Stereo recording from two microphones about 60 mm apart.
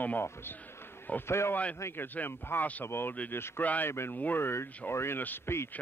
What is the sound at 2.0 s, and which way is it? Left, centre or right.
Speech, left.